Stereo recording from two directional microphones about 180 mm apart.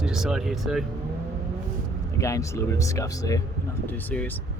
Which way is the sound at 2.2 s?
15° left (ahead or behind).